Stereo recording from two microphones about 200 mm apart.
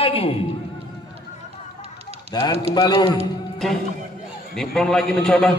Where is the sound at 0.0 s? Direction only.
30° left (ahead or behind).